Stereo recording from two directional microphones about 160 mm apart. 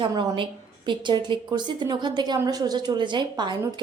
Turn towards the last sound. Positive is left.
turn(degrees=-30)  # may be behind; listen again after turning